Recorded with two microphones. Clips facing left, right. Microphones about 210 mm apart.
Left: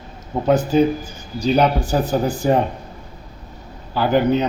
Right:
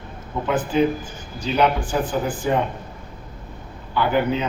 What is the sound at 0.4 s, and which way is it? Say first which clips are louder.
A man's voice: left 4 dB; 40° left (ahead or behind).